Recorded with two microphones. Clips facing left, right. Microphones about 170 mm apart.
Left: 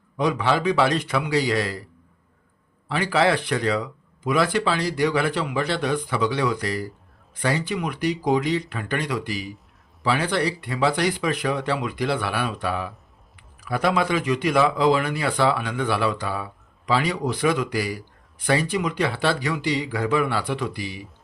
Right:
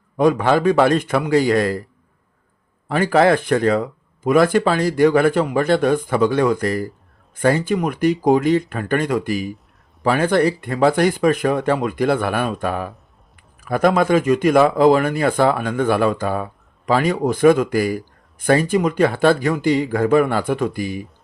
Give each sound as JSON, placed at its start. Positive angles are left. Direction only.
{"t": 0.2, "sound": "speech", "side_deg": -50}
{"t": 2.9, "sound": "speech", "side_deg": -45}